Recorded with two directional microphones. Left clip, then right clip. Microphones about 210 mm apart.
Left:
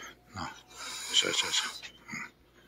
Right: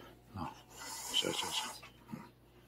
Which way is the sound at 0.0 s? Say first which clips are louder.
Left 5 dB; 5° right (ahead or behind).